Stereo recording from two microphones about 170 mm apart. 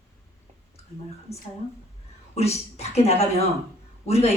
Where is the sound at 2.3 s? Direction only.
40° left (ahead or behind).